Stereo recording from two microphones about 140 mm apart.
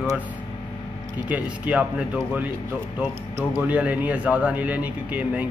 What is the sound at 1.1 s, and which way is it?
Speech, 10° right (ahead or behind).